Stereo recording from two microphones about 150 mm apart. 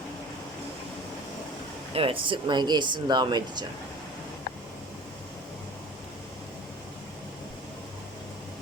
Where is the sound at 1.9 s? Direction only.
40° right (ahead or behind).